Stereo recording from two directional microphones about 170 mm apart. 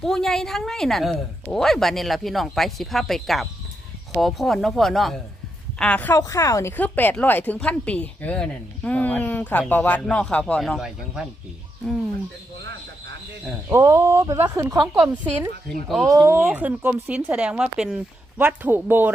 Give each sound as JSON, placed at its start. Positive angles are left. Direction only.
{"t": 0.0, "sound": "a woman's voice", "side_deg": 0}
{"t": 13.7, "sound": "speech", "side_deg": -15}
{"t": 15.0, "sound": "speech", "side_deg": -10}
{"t": 16.0, "sound": "speech", "side_deg": -20}